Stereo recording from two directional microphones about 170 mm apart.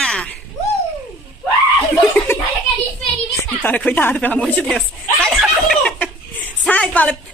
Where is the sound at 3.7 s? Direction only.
10° left (ahead or behind).